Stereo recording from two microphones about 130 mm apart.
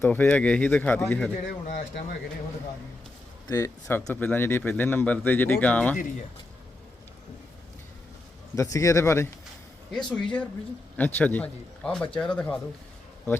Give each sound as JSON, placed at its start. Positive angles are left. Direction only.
{"t": 0.0, "sound": "speech", "side_deg": 15}
{"t": 1.6, "sound": "speech", "side_deg": 70}
{"t": 3.5, "sound": "speech", "side_deg": 20}
{"t": 8.5, "sound": "speech", "side_deg": 25}
{"t": 9.9, "sound": "speech", "side_deg": 5}